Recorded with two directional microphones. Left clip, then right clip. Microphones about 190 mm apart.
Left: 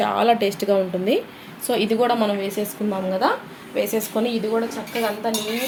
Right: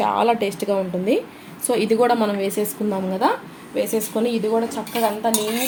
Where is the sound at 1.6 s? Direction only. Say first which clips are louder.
Right 2 dB; 15° right (ahead or behind).